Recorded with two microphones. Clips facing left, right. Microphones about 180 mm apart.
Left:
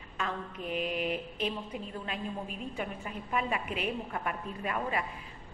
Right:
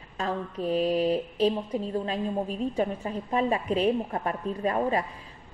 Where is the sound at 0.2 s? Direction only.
35° right (ahead or behind).